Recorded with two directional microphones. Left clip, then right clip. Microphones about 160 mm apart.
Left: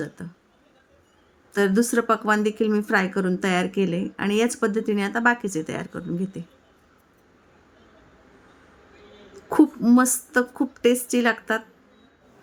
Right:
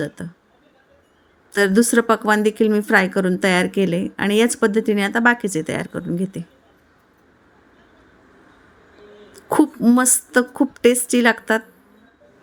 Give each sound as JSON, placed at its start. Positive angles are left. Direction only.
{"t": 0.2, "sound": "speech", "side_deg": -25}
{"t": 1.5, "sound": "speech", "side_deg": -25}
{"t": 9.3, "sound": "speech", "side_deg": -25}